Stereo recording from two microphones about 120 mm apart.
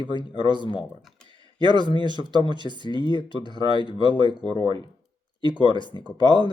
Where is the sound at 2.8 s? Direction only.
40° left (ahead or behind).